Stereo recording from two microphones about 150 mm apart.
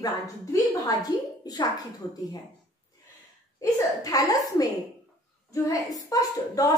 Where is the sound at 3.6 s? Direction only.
20° left (ahead or behind).